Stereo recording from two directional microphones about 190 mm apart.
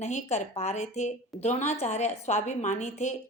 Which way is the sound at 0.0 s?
35° left (ahead or behind).